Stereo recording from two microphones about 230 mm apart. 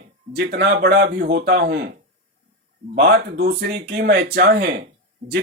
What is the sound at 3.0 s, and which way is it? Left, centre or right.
A man's voice, right.